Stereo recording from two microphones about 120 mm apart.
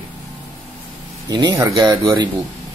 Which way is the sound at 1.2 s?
30° right (ahead or behind).